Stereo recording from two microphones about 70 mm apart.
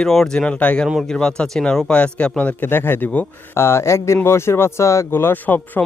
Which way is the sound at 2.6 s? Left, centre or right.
Left.